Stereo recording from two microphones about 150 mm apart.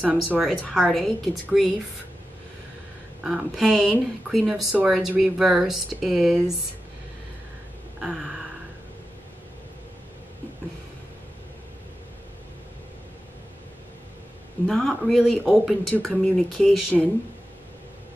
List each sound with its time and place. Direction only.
0.0 s speech: 10° right (ahead or behind)
3.3 s speech: centre (ahead or behind)
8.0 s a sound: 5° right (ahead or behind)
14.7 s speech: centre (ahead or behind)